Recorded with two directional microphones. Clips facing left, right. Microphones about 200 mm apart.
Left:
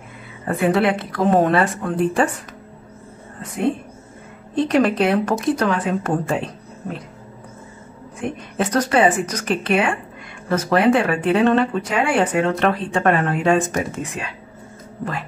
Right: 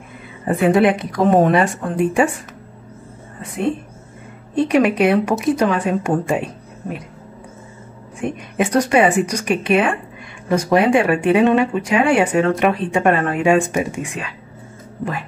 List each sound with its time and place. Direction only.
0.5 s speech: 20° right (ahead or behind)
4.6 s speech: 10° right (ahead or behind)
8.5 s speech: 10° right (ahead or behind)